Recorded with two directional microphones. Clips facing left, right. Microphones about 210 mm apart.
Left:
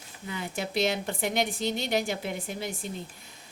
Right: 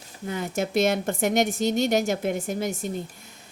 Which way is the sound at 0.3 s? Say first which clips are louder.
Right 6 dB; 45° right (ahead or behind).